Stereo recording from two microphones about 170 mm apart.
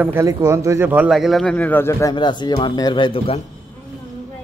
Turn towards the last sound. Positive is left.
turn(degrees=30)  # may be behind; listen again after turning